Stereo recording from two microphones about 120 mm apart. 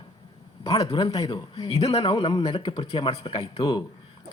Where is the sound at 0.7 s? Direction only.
30° left (ahead or behind).